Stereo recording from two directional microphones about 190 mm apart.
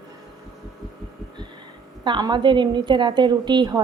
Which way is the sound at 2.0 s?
25° right (ahead or behind).